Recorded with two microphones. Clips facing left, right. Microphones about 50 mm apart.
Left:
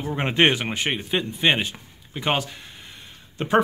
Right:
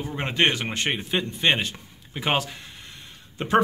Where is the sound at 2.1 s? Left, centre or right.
Centre.